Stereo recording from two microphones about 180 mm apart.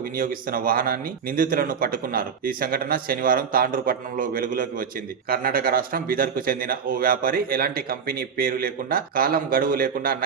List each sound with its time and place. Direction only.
0.0 s a man's voice: 50° right (ahead or behind)